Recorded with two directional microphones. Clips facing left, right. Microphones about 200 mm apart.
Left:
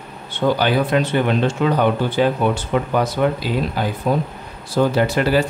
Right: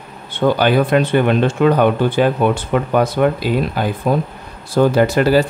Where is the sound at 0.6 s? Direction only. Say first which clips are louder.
Right 4 dB; 55° right (ahead or behind).